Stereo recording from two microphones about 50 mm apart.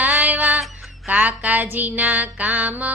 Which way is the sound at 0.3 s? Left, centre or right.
Right.